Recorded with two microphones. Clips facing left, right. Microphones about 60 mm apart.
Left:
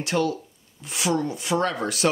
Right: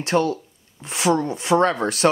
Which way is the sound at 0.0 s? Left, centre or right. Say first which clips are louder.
Right 4 dB; right.